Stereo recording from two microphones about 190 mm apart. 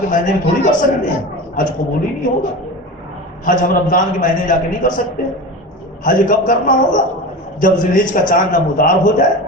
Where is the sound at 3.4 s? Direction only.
45° left (ahead or behind).